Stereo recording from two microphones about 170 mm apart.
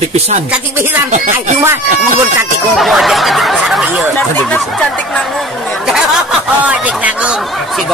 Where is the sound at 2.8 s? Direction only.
Centre (ahead or behind).